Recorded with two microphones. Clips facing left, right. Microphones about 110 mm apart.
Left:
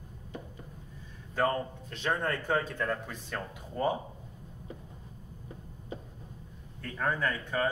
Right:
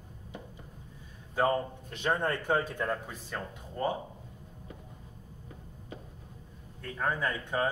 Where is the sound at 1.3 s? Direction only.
15° right (ahead or behind).